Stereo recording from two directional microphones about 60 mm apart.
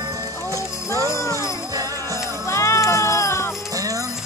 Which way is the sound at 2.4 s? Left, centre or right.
Left.